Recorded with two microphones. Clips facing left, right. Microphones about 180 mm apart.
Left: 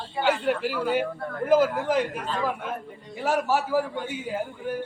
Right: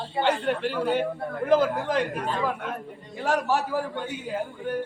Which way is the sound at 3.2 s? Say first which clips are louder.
Even; 5° left (ahead or behind).